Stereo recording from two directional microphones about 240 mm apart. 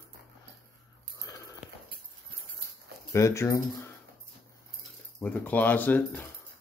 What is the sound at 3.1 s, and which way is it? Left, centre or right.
Speech, centre.